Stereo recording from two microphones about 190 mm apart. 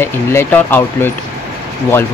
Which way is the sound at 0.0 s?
10° left (ahead or behind).